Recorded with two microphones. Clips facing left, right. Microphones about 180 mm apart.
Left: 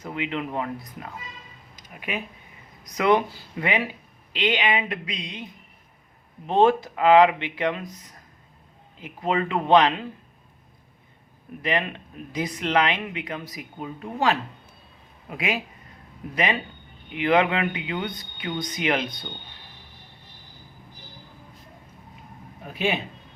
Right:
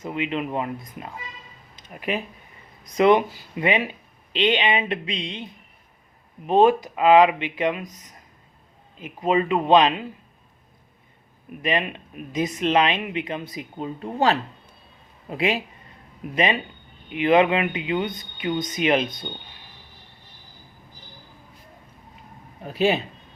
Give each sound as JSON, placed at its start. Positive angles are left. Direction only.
{"t": 0.0, "sound": "speech", "side_deg": -20}
{"t": 1.9, "sound": "speech", "side_deg": -40}
{"t": 2.8, "sound": "speech", "side_deg": -25}
{"t": 6.5, "sound": "speech", "side_deg": -15}
{"t": 11.6, "sound": "speech", "side_deg": -20}
{"t": 22.6, "sound": "speech", "side_deg": -35}